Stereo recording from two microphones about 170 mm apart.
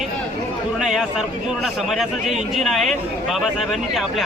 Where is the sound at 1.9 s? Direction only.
Centre (ahead or behind).